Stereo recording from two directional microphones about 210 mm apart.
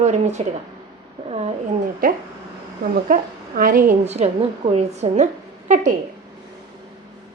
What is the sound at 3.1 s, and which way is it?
A woman's voice, 40° right (ahead or behind).